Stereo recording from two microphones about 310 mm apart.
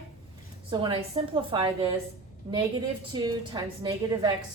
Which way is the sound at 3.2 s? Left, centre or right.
Centre.